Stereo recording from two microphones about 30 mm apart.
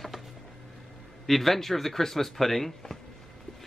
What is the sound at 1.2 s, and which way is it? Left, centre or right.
Speech, centre.